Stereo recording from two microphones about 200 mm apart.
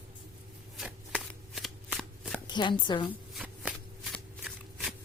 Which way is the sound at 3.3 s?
5° right (ahead or behind).